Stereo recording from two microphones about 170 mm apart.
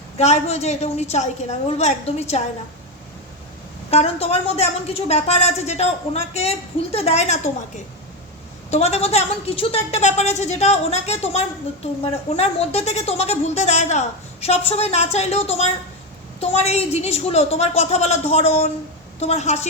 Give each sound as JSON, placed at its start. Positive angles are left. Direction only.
{"t": 0.2, "sound": "a woman's voice", "side_deg": 40}
{"t": 3.8, "sound": "a woman's voice", "side_deg": 35}
{"t": 8.7, "sound": "a woman's voice", "side_deg": 40}